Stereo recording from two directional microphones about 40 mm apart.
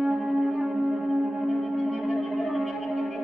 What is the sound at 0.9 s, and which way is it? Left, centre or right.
Music, centre.